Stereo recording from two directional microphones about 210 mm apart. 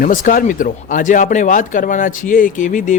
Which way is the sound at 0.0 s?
40° left (ahead or behind).